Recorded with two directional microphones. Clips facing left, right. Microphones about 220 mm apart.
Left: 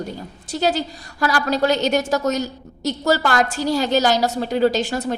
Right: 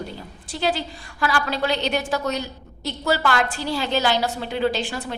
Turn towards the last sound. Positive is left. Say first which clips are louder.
# left 5 dB
turn(degrees=40)  # may be behind; listen again after turning